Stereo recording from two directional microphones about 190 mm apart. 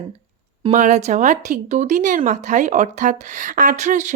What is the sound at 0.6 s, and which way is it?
Speech, 40° right (ahead or behind).